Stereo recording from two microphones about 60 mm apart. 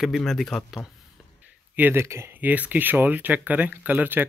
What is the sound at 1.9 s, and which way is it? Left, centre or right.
Speech, right.